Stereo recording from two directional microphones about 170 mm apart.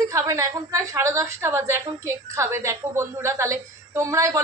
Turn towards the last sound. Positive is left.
turn(degrees=-15)  # may be behind; listen again after turning